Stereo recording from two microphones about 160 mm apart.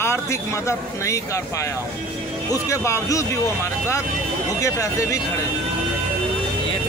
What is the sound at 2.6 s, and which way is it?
Speech, 20° left (ahead or behind).